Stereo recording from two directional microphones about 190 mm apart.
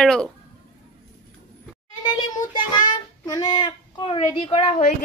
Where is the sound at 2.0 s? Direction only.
25° left (ahead or behind).